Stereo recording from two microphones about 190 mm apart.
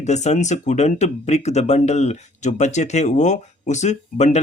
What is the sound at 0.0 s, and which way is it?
Speech, 35° left (ahead or behind).